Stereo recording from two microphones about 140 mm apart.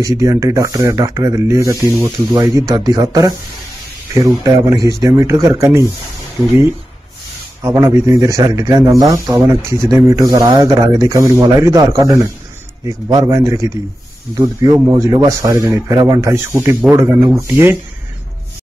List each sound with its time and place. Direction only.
0.0 s speech: 25° right (ahead or behind)
7.6 s speech: 20° right (ahead or behind)